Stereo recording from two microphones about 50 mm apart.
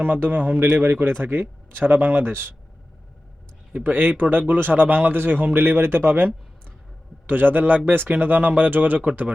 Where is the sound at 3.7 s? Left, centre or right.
Right.